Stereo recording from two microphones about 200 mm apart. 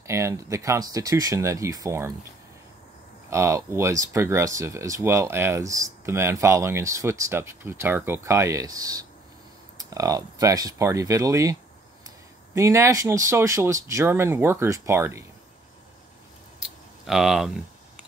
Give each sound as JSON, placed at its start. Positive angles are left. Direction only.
{"t": 0.0, "sound": "speech", "side_deg": -15}
{"t": 3.3, "sound": "speech", "side_deg": -15}
{"t": 12.5, "sound": "speech", "side_deg": -15}
{"t": 16.5, "sound": "a sound", "side_deg": 0}